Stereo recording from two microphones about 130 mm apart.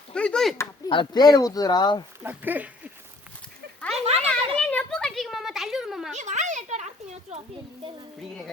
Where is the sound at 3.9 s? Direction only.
50° right (ahead or behind).